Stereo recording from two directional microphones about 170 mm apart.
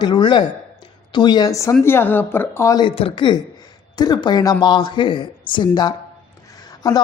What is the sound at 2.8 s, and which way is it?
A woman's voice, 30° left (ahead or behind).